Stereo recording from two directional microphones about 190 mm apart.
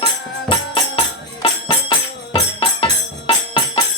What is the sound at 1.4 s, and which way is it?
Music, 25° left (ahead or behind).